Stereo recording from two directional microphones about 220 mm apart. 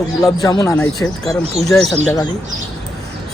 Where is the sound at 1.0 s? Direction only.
Centre (ahead or behind).